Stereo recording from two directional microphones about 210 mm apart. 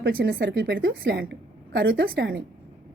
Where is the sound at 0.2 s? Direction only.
50° right (ahead or behind).